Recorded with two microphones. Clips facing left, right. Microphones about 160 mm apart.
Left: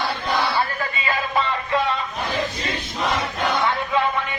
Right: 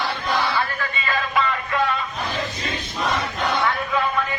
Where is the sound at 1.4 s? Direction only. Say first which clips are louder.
Even; 30° left (ahead or behind).